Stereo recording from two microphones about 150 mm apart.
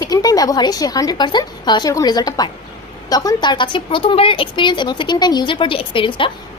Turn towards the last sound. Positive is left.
turn(degrees=35)  # may be behind; listen again after turning